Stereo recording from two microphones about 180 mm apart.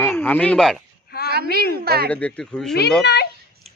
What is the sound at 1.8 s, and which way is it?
Speech, 60° right (ahead or behind).